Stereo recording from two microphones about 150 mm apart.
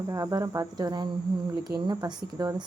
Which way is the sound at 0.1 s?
20° right (ahead or behind).